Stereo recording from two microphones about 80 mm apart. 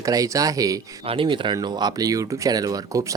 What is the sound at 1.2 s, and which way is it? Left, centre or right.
Speech, right.